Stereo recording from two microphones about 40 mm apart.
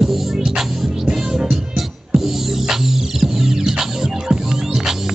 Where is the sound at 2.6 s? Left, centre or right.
Centre.